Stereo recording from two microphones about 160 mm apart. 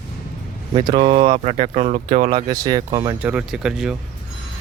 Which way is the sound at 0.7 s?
30° right (ahead or behind).